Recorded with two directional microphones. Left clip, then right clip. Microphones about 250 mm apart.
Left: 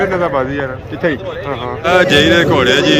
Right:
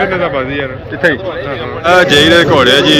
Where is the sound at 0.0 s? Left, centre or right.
Left.